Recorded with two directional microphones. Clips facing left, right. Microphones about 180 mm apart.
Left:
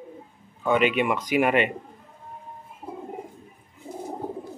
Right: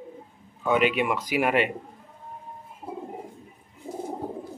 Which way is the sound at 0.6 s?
5° right (ahead or behind).